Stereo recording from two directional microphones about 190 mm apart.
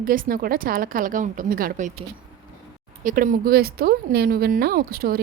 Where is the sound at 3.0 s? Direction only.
45° right (ahead or behind).